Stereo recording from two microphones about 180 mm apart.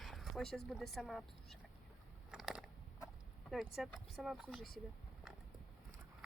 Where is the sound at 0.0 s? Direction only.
Centre (ahead or behind).